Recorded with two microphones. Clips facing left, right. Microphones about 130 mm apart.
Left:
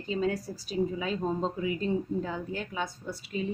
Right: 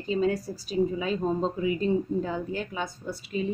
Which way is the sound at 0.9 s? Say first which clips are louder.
Right 3 dB; 20° right (ahead or behind).